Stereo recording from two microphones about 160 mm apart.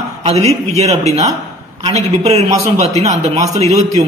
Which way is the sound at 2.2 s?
40° right (ahead or behind).